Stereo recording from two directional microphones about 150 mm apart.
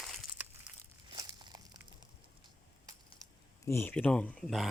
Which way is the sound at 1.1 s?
25° right (ahead or behind).